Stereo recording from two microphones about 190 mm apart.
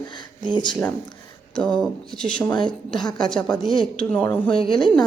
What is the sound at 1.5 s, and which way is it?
Speech, 5° left (ahead or behind).